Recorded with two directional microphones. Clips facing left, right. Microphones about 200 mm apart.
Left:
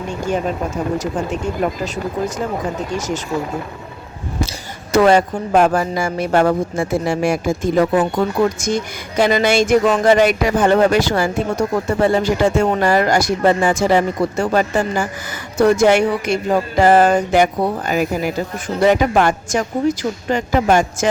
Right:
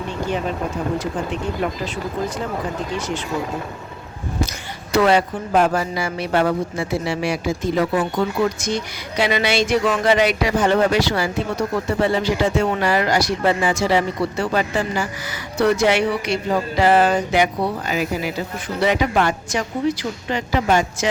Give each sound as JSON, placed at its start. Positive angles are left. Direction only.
{"t": 1.6, "sound": "speech", "side_deg": 45}
{"t": 4.9, "sound": "speech", "side_deg": 45}